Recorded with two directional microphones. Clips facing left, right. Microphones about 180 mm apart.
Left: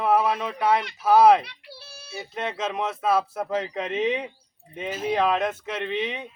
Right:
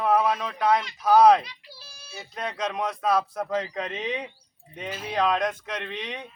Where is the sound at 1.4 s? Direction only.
65° left (ahead or behind).